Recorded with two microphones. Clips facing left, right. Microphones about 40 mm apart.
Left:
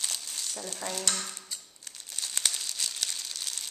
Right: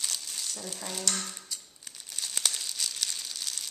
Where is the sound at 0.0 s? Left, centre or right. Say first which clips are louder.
Even; centre.